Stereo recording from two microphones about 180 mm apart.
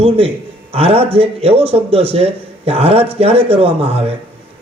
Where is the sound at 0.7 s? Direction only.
35° right (ahead or behind).